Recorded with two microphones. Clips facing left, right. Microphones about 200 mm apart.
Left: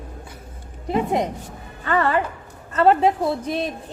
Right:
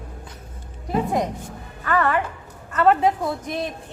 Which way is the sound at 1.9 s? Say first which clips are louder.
Left 1 dB; 30° left (ahead or behind).